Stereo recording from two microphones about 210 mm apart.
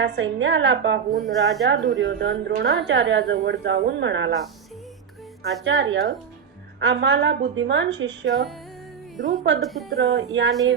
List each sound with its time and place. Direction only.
0.0 s a woman's voice: 60° right (ahead or behind)
1.1 s speech: centre (ahead or behind)
2.0 s a woman's voice: 60° right (ahead or behind)
5.6 s a woman's voice: 60° right (ahead or behind)
8.3 s speech: centre (ahead or behind)
9.1 s a woman's voice: 40° right (ahead or behind)
9.6 s speech: centre (ahead or behind)
10.0 s a woman's voice: 60° right (ahead or behind)